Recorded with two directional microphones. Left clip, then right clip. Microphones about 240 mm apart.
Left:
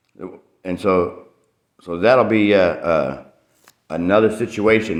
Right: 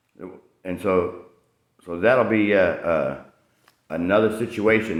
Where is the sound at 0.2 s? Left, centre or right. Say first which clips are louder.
Left 4 dB; left.